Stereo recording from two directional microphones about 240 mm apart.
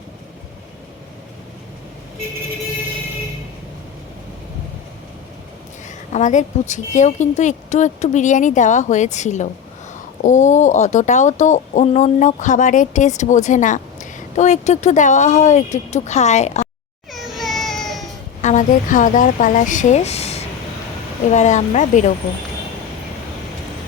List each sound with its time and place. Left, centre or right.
6.1 s a woman's voice: left
17.1 s baby cry: centre
18.4 s a woman's voice: left